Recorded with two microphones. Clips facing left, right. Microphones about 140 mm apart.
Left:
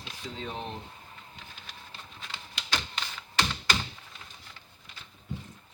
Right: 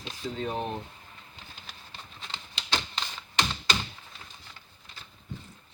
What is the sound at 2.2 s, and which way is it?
Typewriter, 25° right (ahead or behind).